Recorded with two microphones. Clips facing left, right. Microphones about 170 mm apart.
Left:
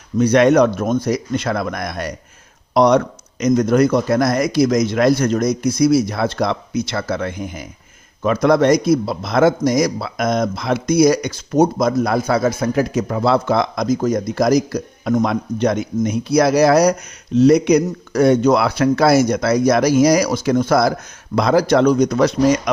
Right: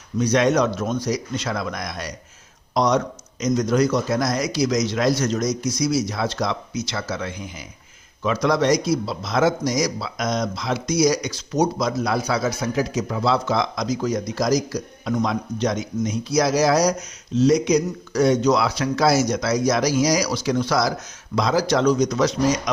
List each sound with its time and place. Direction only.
0.2 s a man's voice: 60° left (ahead or behind)